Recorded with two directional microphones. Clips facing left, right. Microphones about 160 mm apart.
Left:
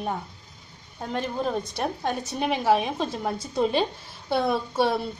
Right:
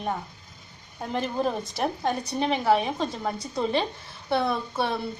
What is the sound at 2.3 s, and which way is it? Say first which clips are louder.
A woman's voice: left 1 dB; 10° left (ahead or behind).